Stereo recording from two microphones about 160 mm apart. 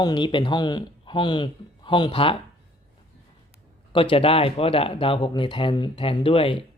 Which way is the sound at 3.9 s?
35° left (ahead or behind).